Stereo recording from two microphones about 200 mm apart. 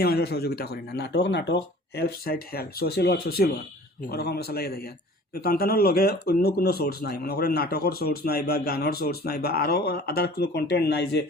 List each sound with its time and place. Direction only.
0.0 s speech: 50° left (ahead or behind)